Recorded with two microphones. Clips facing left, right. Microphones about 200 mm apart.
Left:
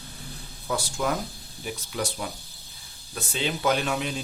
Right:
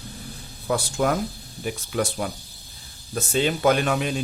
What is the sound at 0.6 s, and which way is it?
A man's voice, 55° right (ahead or behind).